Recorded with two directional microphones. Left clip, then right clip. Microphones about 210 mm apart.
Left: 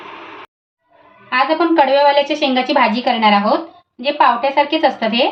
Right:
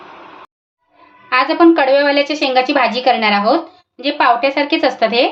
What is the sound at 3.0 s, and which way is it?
A woman's voice, 60° right (ahead or behind).